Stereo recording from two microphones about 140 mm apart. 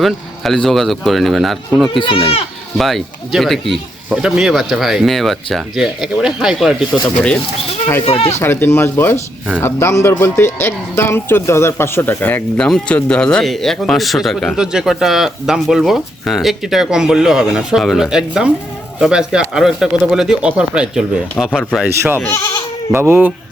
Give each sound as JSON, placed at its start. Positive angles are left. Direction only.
{"t": 0.0, "sound": "speech", "side_deg": 0}
{"t": 1.9, "sound": "speech", "side_deg": 40}
{"t": 2.7, "sound": "speech", "side_deg": 0}
{"t": 7.0, "sound": "speech", "side_deg": 10}
{"t": 8.0, "sound": "speech", "side_deg": 45}
{"t": 8.4, "sound": "speech", "side_deg": 15}
{"t": 22.2, "sound": "speech", "side_deg": 20}
{"t": 22.9, "sound": "speech", "side_deg": -15}